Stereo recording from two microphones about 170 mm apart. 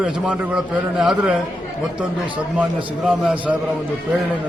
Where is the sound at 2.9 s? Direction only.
5° right (ahead or behind).